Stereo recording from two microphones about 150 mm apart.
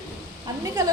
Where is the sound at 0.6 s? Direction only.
25° right (ahead or behind).